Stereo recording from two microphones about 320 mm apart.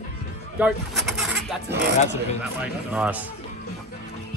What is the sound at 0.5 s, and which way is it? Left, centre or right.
Speech, centre.